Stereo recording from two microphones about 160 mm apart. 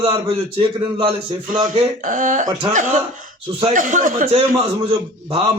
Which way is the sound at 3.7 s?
55° right (ahead or behind).